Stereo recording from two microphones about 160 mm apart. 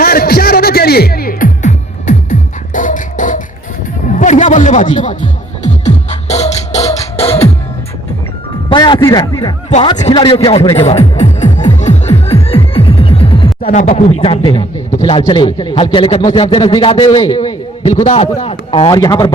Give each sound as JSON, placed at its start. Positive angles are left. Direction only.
{"t": 0.0, "sound": "music", "side_deg": 70}
{"t": 8.7, "sound": "speech", "side_deg": 30}
{"t": 10.2, "sound": "music", "side_deg": 30}
{"t": 13.8, "sound": "a man's voice", "side_deg": 40}